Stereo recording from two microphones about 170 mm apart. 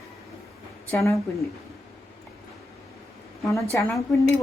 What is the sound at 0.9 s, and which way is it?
Speech, 15° left (ahead or behind).